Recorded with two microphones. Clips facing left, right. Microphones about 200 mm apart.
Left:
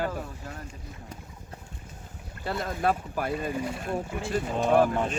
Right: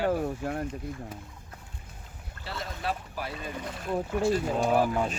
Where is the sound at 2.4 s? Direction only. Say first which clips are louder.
Left 7 dB; 50° left (ahead or behind).